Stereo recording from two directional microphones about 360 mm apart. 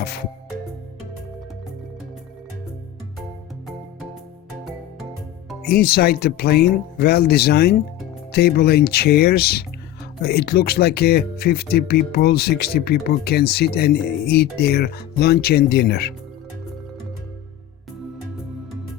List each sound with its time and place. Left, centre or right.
5.6 s speech: left